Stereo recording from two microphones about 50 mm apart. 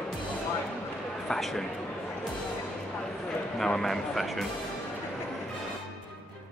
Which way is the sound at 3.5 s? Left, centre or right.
Centre.